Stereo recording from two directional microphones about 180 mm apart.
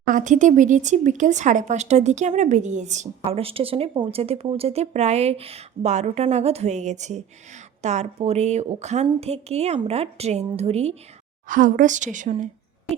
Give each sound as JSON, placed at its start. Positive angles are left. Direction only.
{"t": 0.1, "sound": "speech", "side_deg": -45}
{"t": 11.4, "sound": "a woman's voice", "side_deg": -45}